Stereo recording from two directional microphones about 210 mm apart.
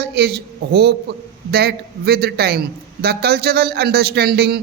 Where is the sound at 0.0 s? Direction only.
50° right (ahead or behind).